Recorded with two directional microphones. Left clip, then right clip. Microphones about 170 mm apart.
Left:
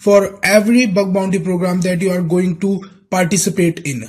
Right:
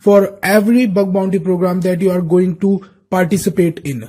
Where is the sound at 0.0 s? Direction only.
40° right (ahead or behind).